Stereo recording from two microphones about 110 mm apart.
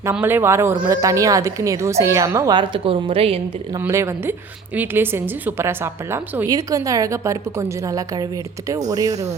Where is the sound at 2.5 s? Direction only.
45° right (ahead or behind).